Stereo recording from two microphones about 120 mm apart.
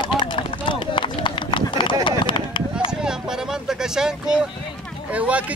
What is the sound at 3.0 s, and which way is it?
Speech, 5° right (ahead or behind).